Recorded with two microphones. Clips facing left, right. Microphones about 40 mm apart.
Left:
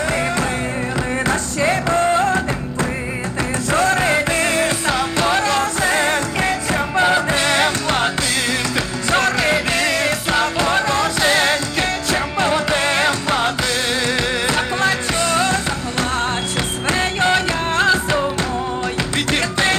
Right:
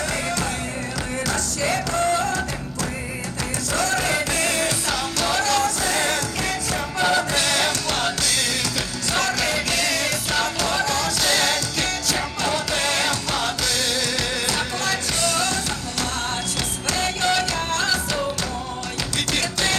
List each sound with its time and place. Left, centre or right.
1.3 s music: left
3.7 s music: left
17.0 s music: left
19.3 s music: left